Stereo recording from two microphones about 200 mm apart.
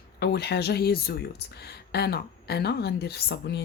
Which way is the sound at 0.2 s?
55° left (ahead or behind).